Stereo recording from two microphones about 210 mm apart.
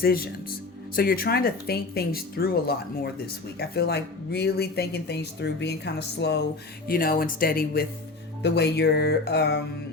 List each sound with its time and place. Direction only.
0.0 s speech: 45° left (ahead or behind)
6.8 s speech: 45° left (ahead or behind)